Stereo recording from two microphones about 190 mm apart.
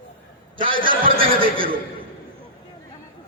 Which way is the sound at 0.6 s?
25° right (ahead or behind).